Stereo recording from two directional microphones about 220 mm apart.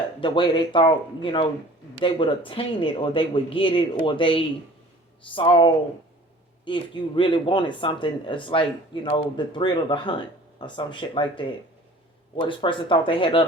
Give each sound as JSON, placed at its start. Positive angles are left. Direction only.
{"t": 0.2, "sound": "speech", "side_deg": 20}